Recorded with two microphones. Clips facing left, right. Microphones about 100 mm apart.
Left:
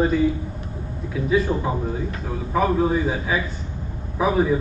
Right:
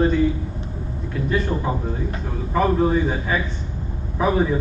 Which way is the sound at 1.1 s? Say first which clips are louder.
Left 2 dB; centre (ahead or behind).